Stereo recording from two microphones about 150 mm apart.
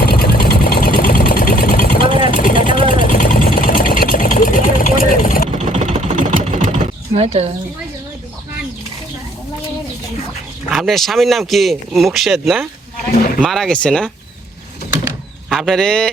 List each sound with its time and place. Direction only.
0.0 s engine: 80° left
2.3 s vehicle: 65° left (ahead or behind)
2.8 s engine: 70° left (ahead or behind)
5.5 s sewing machine: 45° right (ahead or behind)
10.7 s speech: centre (ahead or behind)
15.4 s speech: centre (ahead or behind)